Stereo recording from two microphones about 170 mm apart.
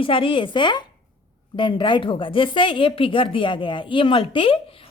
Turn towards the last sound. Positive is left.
turn(degrees=30)  # may be behind; listen again after turning